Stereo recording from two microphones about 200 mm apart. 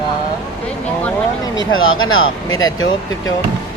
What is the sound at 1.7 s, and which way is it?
Speech, 90° left.